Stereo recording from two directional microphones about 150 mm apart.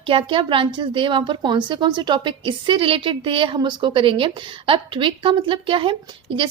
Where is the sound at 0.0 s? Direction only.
35° right (ahead or behind).